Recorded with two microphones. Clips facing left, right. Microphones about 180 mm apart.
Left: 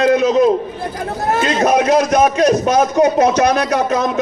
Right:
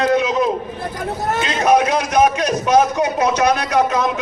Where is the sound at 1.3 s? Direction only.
45° left (ahead or behind).